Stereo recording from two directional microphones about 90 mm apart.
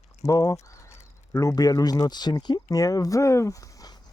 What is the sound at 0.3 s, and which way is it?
Speech, 40° left (ahead or behind).